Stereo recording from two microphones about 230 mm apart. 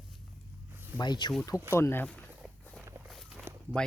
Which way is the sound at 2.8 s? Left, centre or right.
Centre.